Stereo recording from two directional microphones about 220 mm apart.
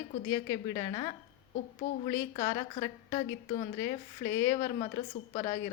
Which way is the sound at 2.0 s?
15° left (ahead or behind).